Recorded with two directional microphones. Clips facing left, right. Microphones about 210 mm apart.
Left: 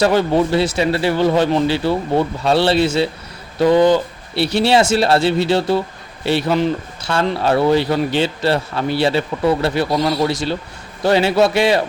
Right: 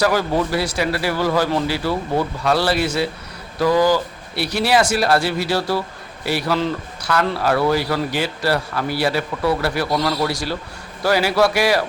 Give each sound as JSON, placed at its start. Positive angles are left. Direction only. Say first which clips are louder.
{"t": 0.0, "sound": "a man's voice", "louder": "left 4 dB", "side_deg": 25}